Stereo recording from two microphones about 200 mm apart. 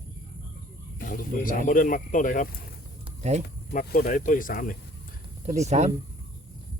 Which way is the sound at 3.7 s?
45° left (ahead or behind).